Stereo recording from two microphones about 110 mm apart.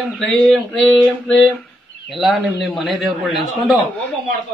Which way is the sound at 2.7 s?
Centre (ahead or behind).